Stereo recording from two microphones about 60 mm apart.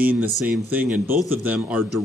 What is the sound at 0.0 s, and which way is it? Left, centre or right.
Speech, right.